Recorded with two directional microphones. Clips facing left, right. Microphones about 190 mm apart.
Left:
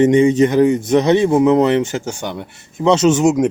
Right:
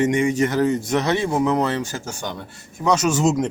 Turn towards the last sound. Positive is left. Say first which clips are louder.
# left 6 dB
turn(degrees=20)  # may be behind; listen again after turning